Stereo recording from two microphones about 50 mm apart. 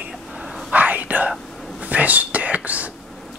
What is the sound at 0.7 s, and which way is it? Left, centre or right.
Whispering, right.